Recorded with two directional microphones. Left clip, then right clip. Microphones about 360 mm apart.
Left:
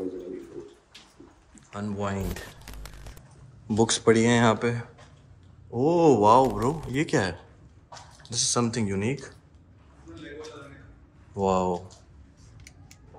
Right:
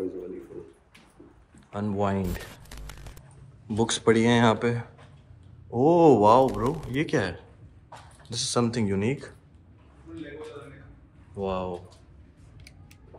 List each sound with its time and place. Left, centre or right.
1.7 s speech: centre
3.0 s a sound: centre
3.6 s speech: centre
11.3 s speech: centre